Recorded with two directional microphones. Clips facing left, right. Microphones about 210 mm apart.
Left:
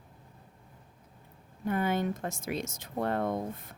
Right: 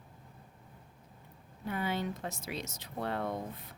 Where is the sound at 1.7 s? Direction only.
50° left (ahead or behind).